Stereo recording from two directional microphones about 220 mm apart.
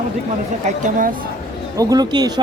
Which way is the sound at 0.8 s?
40° right (ahead or behind).